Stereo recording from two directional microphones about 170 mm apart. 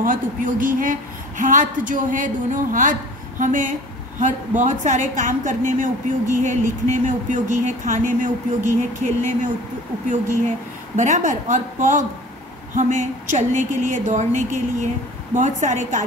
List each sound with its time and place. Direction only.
0.0 s a woman's voice: 55° right (ahead or behind)